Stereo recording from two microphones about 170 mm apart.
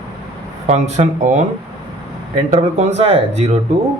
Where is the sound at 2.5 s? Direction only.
40° right (ahead or behind).